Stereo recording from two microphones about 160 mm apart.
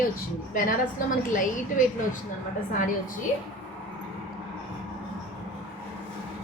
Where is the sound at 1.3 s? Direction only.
55° left (ahead or behind).